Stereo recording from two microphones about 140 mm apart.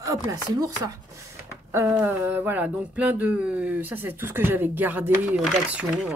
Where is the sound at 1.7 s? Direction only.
15° right (ahead or behind).